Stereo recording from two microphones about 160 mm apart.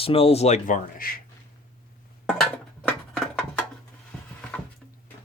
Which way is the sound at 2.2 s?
5° left (ahead or behind).